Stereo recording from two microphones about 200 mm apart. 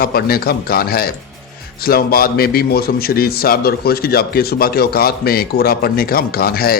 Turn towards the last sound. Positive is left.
turn(degrees=50)  # may be behind; listen again after turning